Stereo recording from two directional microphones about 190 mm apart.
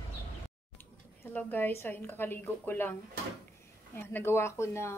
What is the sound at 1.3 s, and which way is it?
A woman's voice, 10° left (ahead or behind).